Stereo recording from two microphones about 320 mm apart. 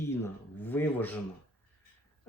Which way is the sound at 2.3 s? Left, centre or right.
Centre.